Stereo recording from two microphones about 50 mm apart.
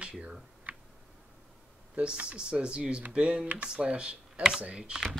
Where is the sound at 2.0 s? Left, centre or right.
Right.